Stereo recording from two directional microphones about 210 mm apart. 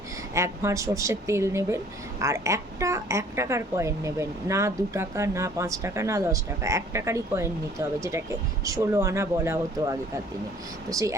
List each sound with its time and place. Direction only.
0.3 s speech: 15° right (ahead or behind)